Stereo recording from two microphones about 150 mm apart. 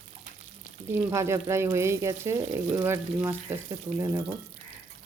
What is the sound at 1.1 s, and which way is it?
Speech, 20° right (ahead or behind).